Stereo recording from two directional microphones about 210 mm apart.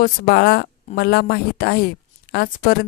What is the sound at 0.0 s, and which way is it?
A woman's voice, 50° left (ahead or behind).